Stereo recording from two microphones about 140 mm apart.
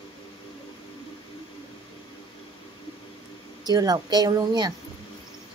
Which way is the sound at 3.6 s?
30° right (ahead or behind).